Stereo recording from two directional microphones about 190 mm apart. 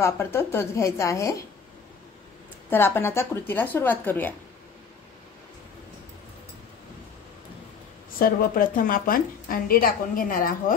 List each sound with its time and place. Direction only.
0.0 s a woman's voice: 15° left (ahead or behind)
2.7 s a woman's voice: 10° left (ahead or behind)
8.2 s a woman's voice: 50° left (ahead or behind)